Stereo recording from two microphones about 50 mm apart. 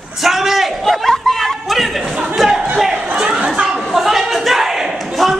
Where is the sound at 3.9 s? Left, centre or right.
Centre.